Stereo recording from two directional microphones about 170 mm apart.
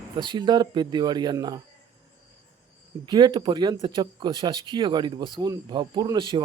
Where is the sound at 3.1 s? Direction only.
25° right (ahead or behind).